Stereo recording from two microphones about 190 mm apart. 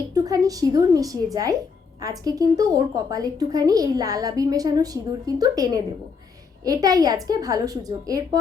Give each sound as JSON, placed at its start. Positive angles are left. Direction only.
{"t": 0.1, "sound": "a woman's voice", "side_deg": -20}